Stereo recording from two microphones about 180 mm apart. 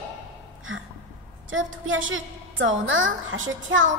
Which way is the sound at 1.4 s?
90° right.